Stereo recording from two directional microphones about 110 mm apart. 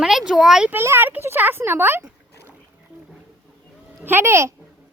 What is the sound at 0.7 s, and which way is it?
Speech, 20° right (ahead or behind).